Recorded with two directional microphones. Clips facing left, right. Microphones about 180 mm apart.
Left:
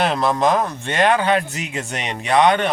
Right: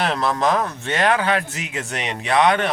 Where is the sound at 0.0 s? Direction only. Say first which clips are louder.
Left 3 dB; centre (ahead or behind).